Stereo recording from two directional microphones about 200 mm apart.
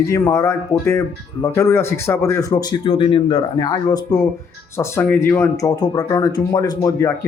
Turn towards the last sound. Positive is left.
turn(degrees=15)  # may be behind; listen again after turning